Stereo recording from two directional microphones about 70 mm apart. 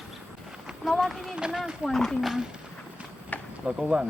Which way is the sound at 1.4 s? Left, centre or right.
Centre.